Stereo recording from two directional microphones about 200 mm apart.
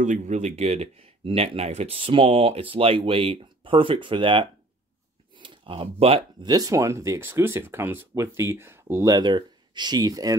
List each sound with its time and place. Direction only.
0.0 s speech: 35° right (ahead or behind); by 10.3 s 20° right (ahead or behind)